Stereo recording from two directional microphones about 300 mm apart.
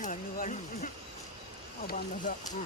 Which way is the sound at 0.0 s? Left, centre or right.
Left.